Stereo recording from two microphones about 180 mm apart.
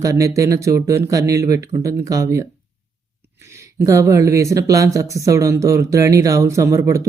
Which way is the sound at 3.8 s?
15° right (ahead or behind).